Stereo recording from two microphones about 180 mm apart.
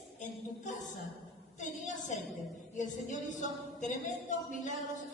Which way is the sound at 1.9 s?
45° left (ahead or behind).